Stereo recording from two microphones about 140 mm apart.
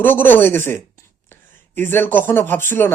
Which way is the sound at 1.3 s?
15° left (ahead or behind).